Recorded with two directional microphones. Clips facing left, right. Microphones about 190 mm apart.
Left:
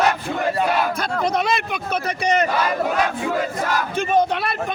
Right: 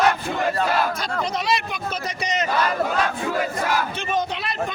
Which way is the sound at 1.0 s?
55° left (ahead or behind).